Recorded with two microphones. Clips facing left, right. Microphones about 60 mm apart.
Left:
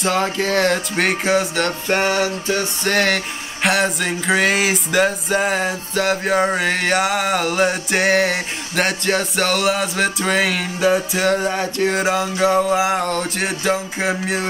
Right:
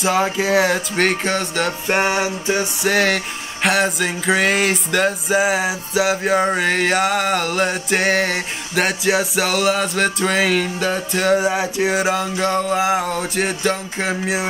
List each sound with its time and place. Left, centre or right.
0.0 s music: centre
1.9 s music: centre
2.9 s music: centre